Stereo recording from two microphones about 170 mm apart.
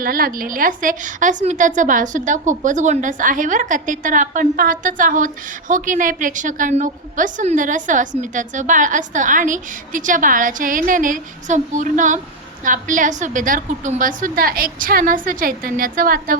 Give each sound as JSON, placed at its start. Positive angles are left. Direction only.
{"t": 0.0, "sound": "a woman's voice", "side_deg": -55}